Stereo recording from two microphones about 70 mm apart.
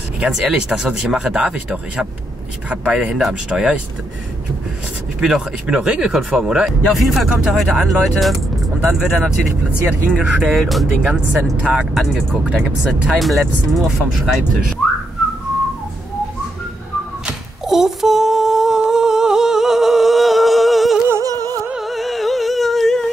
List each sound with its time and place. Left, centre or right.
0.2 s speech: centre
5.2 s speech: centre
11.6 s speech: centre
11.9 s speech: centre
12.4 s speech: centre
13.2 s speech: centre
17.3 s humming: centre
21.2 s music: right
21.7 s music: centre